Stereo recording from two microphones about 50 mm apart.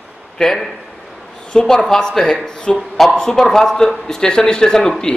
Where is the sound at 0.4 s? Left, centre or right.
Centre.